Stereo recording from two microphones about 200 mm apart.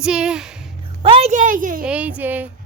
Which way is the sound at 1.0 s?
30° right (ahead or behind).